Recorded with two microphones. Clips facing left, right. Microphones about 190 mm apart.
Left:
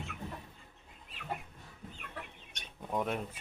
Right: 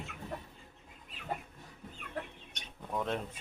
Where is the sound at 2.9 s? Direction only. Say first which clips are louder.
Left 1 dB; 10° left (ahead or behind).